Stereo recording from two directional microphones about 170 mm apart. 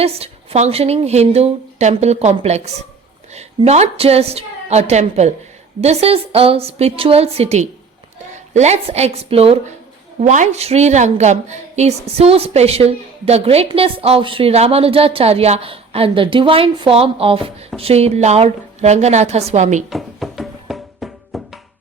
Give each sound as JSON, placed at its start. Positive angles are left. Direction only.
{"t": 0.0, "sound": "a woman's voice", "side_deg": -40}
{"t": 19.9, "sound": "music", "side_deg": 0}